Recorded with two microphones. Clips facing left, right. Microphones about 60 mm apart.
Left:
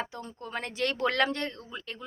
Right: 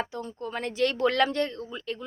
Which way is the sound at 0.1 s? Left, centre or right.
Left.